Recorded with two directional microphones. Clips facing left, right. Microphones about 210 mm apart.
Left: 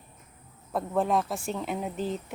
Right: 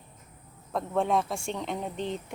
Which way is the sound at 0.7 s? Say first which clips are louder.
Even; 5° left (ahead or behind).